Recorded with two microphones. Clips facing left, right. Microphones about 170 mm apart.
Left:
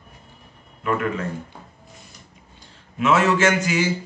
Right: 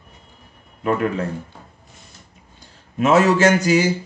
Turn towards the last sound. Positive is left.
turn(degrees=-40)  # may be behind; listen again after turning